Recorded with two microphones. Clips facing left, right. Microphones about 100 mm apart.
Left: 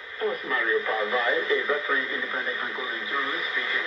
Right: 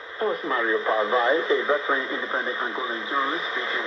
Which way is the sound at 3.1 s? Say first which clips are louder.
Right 5 dB; 30° right (ahead or behind).